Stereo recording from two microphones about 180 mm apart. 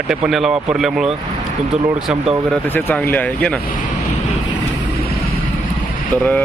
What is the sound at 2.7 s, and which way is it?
Speech, 10° left (ahead or behind).